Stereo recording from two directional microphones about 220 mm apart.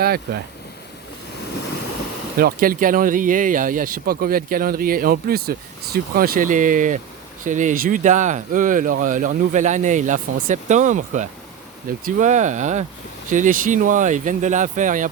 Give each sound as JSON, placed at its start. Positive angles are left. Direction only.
{"t": 2.4, "sound": "speech", "side_deg": -40}